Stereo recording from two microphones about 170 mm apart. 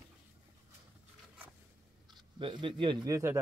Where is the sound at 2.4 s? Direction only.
30° right (ahead or behind).